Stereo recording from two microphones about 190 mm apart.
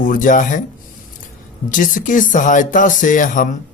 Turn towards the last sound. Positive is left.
turn(degrees=45)  # may be behind; listen again after turning